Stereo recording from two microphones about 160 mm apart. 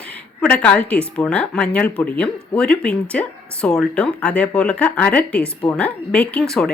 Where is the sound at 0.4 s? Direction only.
5° left (ahead or behind).